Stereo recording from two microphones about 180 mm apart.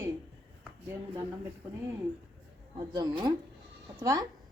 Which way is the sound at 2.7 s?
25° right (ahead or behind).